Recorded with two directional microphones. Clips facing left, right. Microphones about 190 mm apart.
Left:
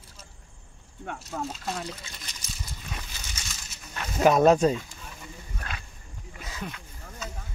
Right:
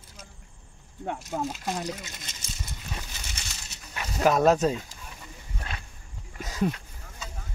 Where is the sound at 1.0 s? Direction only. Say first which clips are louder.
Right 3 dB; 20° right (ahead or behind).